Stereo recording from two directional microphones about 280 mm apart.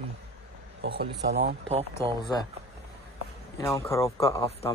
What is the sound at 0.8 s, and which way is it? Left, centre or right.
Speech, right.